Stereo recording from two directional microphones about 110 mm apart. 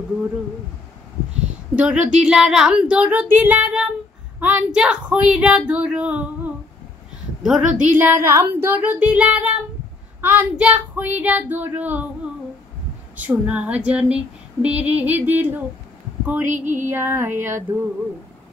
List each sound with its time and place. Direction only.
1.4 s speech: 10° right (ahead or behind)
13.1 s speech: 15° right (ahead or behind)
16.9 s music: 20° right (ahead or behind)